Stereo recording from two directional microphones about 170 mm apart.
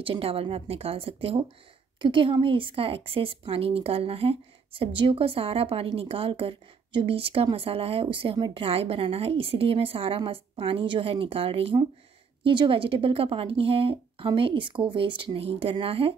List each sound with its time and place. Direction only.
0.0 s a woman's voice: 35° right (ahead or behind)